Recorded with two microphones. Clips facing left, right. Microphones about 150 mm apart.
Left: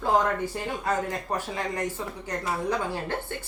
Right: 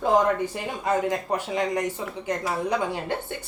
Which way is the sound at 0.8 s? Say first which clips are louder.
Right 6 dB; 15° right (ahead or behind).